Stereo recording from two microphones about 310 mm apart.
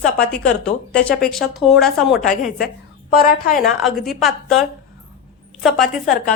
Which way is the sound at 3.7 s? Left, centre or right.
Centre.